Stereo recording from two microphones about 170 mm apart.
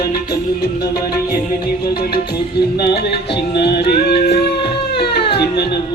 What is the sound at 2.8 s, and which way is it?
Music, 70° left (ahead or behind).